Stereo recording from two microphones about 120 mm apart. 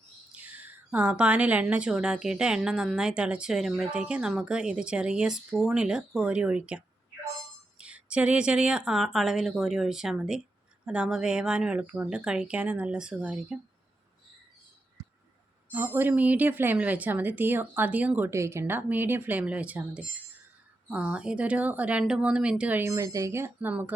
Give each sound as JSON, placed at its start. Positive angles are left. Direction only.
{"t": 0.3, "sound": "a woman's voice", "side_deg": -15}
{"t": 15.7, "sound": "a woman's voice", "side_deg": -15}
{"t": 18.3, "sound": "speech", "side_deg": -25}
{"t": 18.6, "sound": "a woman's voice", "side_deg": -15}
{"t": 22.9, "sound": "speech", "side_deg": -30}